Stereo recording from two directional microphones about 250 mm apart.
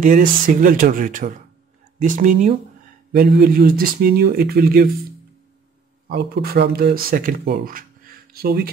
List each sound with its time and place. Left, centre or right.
0.0 s speech: right
6.0 s speech: right